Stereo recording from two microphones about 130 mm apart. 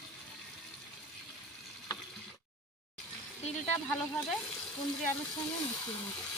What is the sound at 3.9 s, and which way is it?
Speech, 5° left (ahead or behind).